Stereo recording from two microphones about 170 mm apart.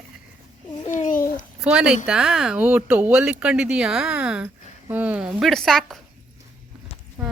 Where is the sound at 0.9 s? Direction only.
50° left (ahead or behind).